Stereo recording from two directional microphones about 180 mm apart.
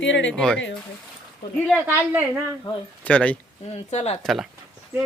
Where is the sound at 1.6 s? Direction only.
10° right (ahead or behind).